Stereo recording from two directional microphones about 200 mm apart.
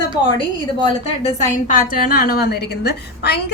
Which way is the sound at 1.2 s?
40° left (ahead or behind).